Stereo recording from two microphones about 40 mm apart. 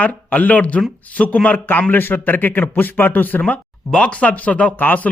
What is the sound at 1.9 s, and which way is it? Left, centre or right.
Speech, left.